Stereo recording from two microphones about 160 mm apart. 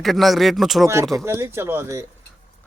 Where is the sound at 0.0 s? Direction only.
Centre (ahead or behind).